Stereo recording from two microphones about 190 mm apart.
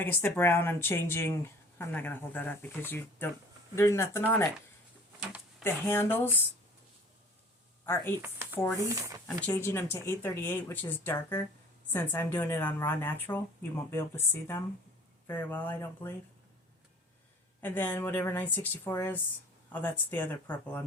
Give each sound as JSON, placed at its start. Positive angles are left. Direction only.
{"t": 0.0, "sound": "a woman's voice", "side_deg": 10}
{"t": 5.6, "sound": "a woman's voice", "side_deg": 10}
{"t": 8.2, "sound": "speech", "side_deg": -10}
{"t": 8.5, "sound": "a woman's voice", "side_deg": 10}
{"t": 8.9, "sound": "speech", "side_deg": -15}
{"t": 9.2, "sound": "a woman's voice", "side_deg": 15}
{"t": 17.6, "sound": "a woman's voice", "side_deg": 10}